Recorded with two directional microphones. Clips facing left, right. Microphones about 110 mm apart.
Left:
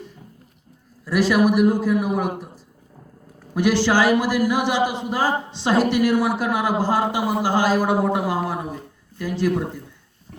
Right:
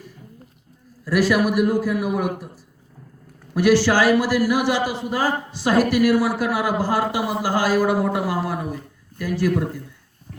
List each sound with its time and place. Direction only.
1.0 s a man's voice: 20° left (ahead or behind)
3.5 s a man's voice: 20° left (ahead or behind)